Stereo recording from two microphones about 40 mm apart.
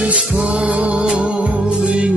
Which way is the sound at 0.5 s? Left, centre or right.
Right.